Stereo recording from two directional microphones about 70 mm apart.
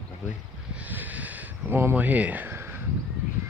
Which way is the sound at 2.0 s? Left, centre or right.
Right.